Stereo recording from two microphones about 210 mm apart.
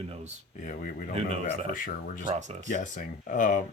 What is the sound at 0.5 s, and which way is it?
Speech, 40° left (ahead or behind).